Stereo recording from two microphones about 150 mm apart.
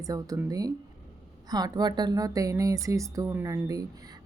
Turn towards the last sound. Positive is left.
turn(degrees=-25)  # may be behind; listen again after turning